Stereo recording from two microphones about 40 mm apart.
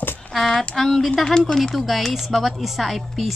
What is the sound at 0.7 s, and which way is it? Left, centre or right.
A woman's voice, centre.